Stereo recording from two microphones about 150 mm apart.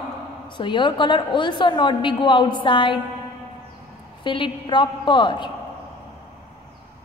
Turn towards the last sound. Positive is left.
turn(degrees=30)  # may be behind; listen again after turning